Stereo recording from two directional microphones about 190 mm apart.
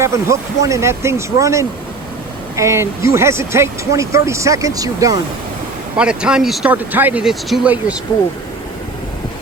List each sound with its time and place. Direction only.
0.0 s speech: 15° right (ahead or behind)
6.0 s speech: 5° right (ahead or behind)